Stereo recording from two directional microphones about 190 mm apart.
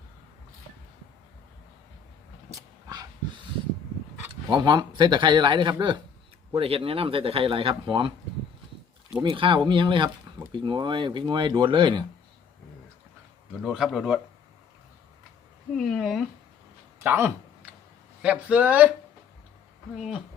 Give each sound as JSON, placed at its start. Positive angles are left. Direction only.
{"t": 2.5, "sound": "dog", "side_deg": -20}
{"t": 4.3, "sound": "speech", "side_deg": -25}
{"t": 9.2, "sound": "speech", "side_deg": -25}
{"t": 13.6, "sound": "speech", "side_deg": 0}
{"t": 15.7, "sound": "a sound", "side_deg": 0}
{"t": 17.0, "sound": "speech", "side_deg": -10}
{"t": 20.0, "sound": "speech", "side_deg": -5}